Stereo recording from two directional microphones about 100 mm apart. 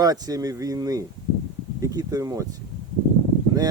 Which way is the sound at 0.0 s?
40° right (ahead or behind).